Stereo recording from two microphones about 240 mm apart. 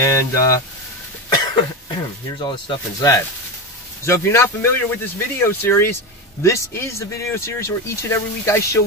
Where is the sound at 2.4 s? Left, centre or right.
Centre.